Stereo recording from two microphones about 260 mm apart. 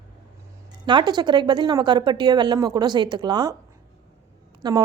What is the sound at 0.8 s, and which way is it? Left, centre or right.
Speech, centre.